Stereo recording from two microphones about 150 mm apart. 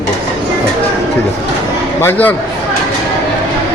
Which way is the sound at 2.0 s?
15° left (ahead or behind).